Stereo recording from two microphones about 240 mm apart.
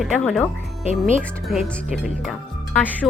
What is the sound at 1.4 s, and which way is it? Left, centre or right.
A woman's voice, centre.